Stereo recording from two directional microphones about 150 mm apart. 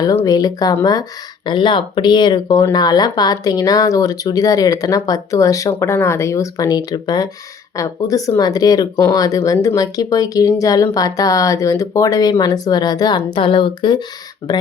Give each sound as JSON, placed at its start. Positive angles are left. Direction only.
{"t": 0.0, "sound": "speech", "side_deg": 25}